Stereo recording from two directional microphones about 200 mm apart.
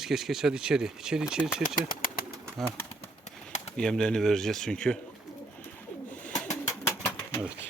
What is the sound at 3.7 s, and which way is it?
Speech, 5° left (ahead or behind).